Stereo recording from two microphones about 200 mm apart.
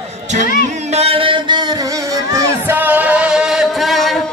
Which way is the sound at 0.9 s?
30° right (ahead or behind).